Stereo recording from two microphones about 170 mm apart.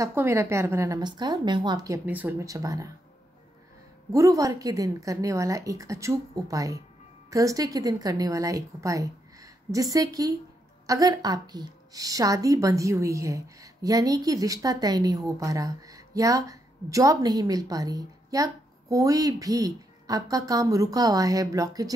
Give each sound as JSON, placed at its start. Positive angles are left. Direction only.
{"t": 0.0, "sound": "a woman's voice", "side_deg": -15}
{"t": 2.0, "sound": "a woman's voice", "side_deg": -10}
{"t": 4.1, "sound": "a woman's voice", "side_deg": -20}